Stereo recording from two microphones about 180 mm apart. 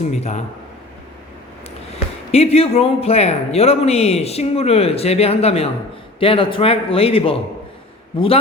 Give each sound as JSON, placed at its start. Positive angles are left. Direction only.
{"t": 0.0, "sound": "a man's voice", "side_deg": 40}
{"t": 2.3, "sound": "a man's voice", "side_deg": 35}